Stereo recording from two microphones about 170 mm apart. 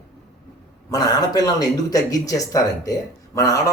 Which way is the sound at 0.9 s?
20° left (ahead or behind).